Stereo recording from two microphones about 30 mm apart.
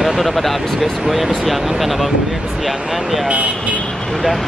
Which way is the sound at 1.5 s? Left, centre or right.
Centre.